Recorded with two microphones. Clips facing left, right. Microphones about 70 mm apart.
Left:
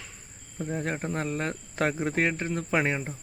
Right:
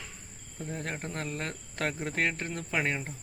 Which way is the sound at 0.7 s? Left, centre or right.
Centre.